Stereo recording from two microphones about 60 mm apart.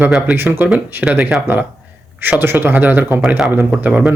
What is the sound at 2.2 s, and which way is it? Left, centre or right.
Speech, right.